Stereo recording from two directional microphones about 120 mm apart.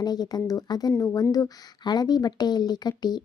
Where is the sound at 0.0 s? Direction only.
35° left (ahead or behind).